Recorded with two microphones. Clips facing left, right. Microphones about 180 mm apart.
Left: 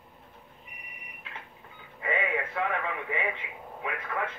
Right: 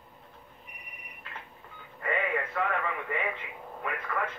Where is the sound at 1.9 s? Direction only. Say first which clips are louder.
Even; 5° left (ahead or behind).